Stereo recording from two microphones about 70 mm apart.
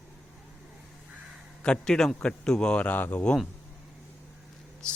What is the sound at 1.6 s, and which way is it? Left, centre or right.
A man's voice, centre.